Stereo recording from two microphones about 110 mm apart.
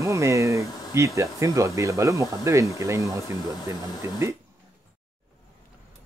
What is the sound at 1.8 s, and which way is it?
Speech, 30° right (ahead or behind).